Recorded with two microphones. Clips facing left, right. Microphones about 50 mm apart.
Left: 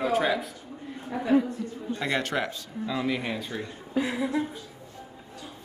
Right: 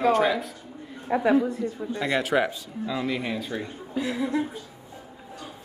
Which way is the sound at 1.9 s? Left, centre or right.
Centre.